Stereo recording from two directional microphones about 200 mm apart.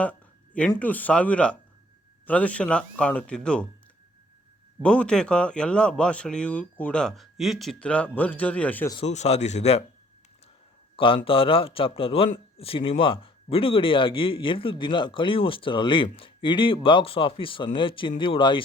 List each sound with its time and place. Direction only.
0.0 s a sound: 5° left (ahead or behind)
0.8 s a man's voice: 10° left (ahead or behind)
4.8 s a man's voice: 5° left (ahead or behind)
9.0 s speech: 35° left (ahead or behind)
10.9 s a man's voice: 25° left (ahead or behind)